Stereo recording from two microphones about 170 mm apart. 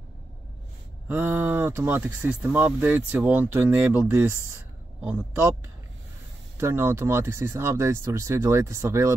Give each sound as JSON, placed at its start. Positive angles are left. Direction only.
{"t": 1.0, "sound": "speech", "side_deg": -10}
{"t": 6.6, "sound": "speech", "side_deg": -15}